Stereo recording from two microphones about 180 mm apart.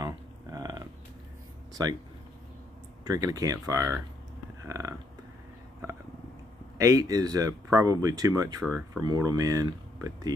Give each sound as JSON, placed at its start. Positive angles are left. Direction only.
{"t": 0.0, "sound": "a sound", "side_deg": -20}
{"t": 3.1, "sound": "speech", "side_deg": -20}
{"t": 4.6, "sound": "burping", "side_deg": -20}
{"t": 6.8, "sound": "speech", "side_deg": -20}
{"t": 8.6, "sound": "speech", "side_deg": 5}
{"t": 9.0, "sound": "speech", "side_deg": -20}